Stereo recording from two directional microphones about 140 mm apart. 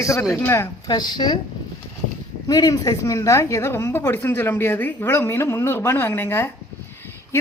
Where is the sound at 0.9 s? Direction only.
30° left (ahead or behind).